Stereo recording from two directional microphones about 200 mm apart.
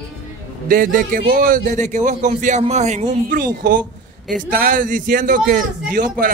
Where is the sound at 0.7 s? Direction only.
45° right (ahead or behind).